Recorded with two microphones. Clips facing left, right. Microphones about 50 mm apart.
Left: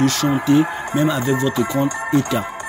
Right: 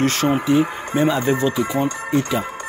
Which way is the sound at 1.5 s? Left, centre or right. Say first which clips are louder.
Left 1 dB; centre.